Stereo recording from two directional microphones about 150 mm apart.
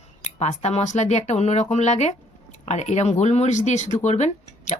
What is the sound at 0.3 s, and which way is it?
Speech, 45° left (ahead or behind).